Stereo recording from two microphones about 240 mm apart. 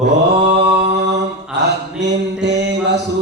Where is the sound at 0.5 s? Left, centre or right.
Right.